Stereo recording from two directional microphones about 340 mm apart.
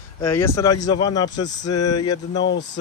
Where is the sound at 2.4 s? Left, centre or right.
Left.